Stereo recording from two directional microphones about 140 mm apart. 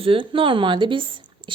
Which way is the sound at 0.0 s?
40° right (ahead or behind).